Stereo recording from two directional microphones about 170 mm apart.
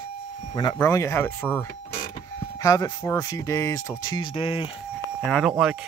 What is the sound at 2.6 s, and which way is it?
Speech, 20° left (ahead or behind).